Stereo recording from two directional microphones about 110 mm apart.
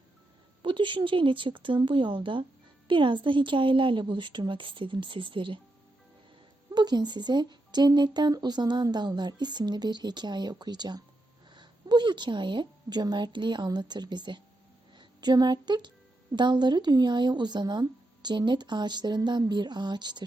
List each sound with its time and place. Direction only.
0.6 s speech: 45° right (ahead or behind)
6.7 s a woman's voice: 40° right (ahead or behind)